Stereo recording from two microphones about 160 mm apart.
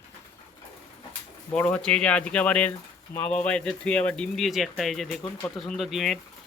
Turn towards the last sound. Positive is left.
turn(degrees=0)  # may be behind; listen again after turning